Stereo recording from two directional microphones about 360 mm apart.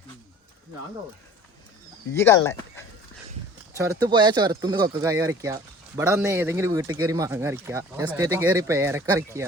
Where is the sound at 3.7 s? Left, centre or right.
Centre.